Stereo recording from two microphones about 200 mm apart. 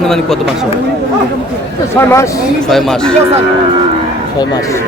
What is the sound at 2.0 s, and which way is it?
Speech, 10° left (ahead or behind).